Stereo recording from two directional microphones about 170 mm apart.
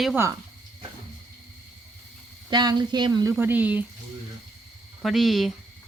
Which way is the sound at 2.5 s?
25° right (ahead or behind).